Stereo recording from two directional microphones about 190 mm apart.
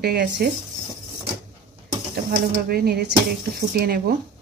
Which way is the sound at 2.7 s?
55° right (ahead or behind).